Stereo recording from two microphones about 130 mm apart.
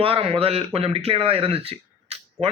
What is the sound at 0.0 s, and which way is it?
A man's voice, 45° right (ahead or behind).